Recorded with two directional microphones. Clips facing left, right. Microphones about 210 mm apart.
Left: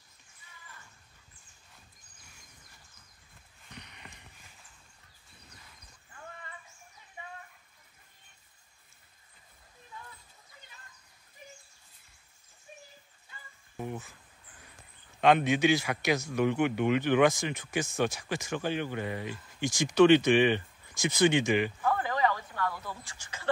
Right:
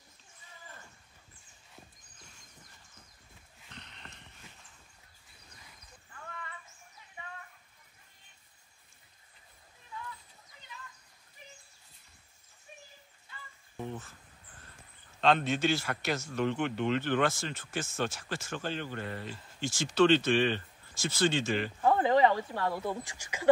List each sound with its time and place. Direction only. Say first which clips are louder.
3.7 s a sound: left 2 dB; 10° left (ahead or behind)
13.7 s speech: left 2 dB; 10° left (ahead or behind)
15.1 s speech: left 3 dB; 15° left (ahead or behind)
21.8 s speech: right 4 dB; 25° right (ahead or behind)